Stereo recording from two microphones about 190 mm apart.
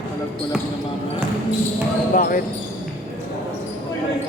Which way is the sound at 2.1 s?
45° left (ahead or behind).